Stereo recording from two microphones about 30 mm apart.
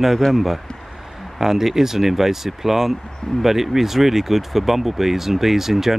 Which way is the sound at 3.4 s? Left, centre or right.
Centre.